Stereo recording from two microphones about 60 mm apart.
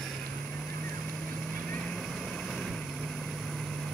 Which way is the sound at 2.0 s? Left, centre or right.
Centre.